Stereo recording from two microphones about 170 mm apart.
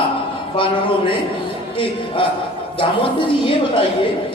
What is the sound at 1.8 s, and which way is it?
A man's voice, 30° left (ahead or behind).